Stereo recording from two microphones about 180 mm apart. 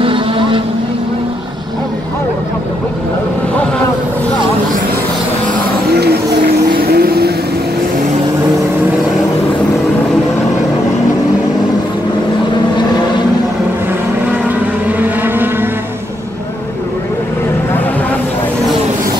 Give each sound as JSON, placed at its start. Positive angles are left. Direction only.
{"t": 0.0, "sound": "vehicle", "side_deg": -30}
{"t": 5.9, "sound": "vehicle", "side_deg": -65}
{"t": 14.3, "sound": "vehicle", "side_deg": -10}